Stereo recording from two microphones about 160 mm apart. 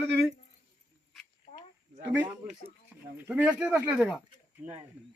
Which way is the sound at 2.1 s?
10° right (ahead or behind).